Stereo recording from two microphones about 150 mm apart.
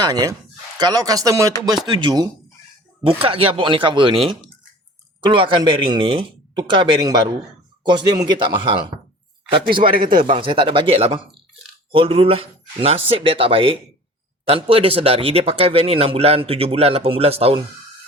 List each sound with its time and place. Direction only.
0.0 s speech: 25° right (ahead or behind)
10.0 s speech: 70° right (ahead or behind)
10.2 s speech: 35° right (ahead or behind)